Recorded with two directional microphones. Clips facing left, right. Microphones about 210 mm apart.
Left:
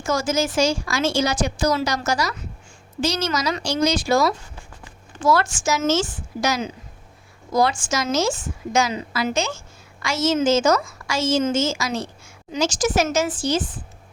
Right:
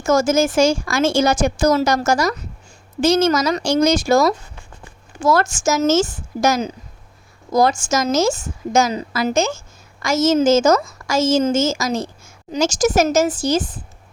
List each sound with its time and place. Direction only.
0.0 s a woman's voice: 45° right (ahead or behind)